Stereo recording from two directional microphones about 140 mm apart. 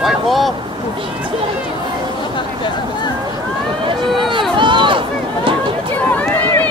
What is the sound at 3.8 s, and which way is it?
Run, 35° right (ahead or behind).